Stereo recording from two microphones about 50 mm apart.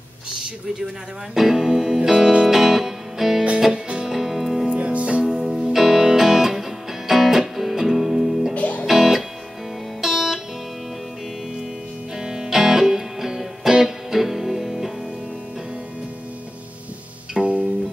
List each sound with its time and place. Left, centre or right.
1.3 s speech: centre
2.0 s music: centre
4.6 s music: right; by 8.5 s centre
8.5 s music: left
8.8 s music: centre
12.2 s music: centre
17.4 s music: right